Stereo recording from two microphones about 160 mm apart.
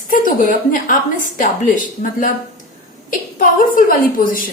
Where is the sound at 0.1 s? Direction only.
60° left (ahead or behind).